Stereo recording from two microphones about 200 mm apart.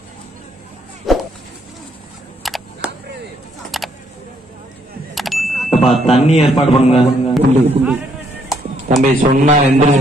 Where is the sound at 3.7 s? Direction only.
Centre (ahead or behind).